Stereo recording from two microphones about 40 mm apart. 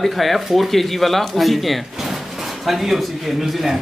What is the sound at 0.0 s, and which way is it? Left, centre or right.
Speech, centre.